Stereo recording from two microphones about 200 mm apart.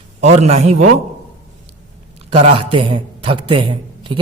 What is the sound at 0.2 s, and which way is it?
Speech, 35° right (ahead or behind).